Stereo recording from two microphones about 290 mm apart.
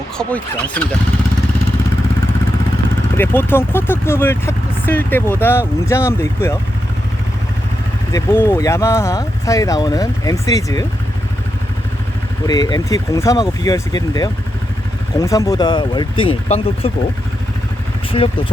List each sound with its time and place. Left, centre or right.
0.2 s speech: centre
3.2 s speech: centre
8.1 s speech: centre
12.5 s speech: centre
18.1 s speech: centre